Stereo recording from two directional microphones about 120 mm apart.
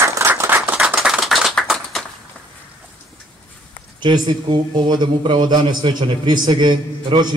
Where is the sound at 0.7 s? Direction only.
5° right (ahead or behind).